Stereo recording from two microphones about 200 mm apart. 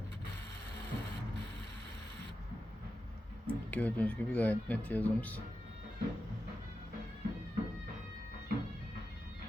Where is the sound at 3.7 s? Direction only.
10° left (ahead or behind).